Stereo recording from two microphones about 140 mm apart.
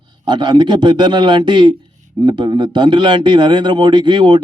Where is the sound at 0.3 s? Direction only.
30° right (ahead or behind).